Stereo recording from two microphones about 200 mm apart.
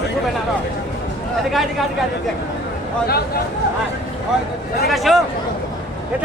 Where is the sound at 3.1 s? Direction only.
50° left (ahead or behind).